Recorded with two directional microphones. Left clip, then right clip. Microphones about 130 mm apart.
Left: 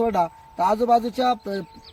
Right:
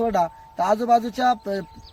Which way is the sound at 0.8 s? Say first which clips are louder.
Even; 30° right (ahead or behind).